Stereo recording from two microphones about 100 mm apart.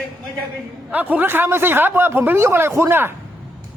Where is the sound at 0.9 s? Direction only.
15° right (ahead or behind).